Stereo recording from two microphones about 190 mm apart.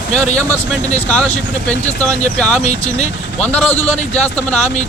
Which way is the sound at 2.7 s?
35° left (ahead or behind).